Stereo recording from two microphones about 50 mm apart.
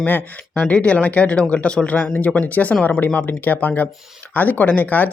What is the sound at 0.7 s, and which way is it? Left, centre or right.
Speech, left.